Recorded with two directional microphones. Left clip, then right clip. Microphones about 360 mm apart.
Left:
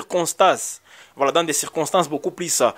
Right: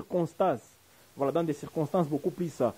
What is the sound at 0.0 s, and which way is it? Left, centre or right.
Speech, centre.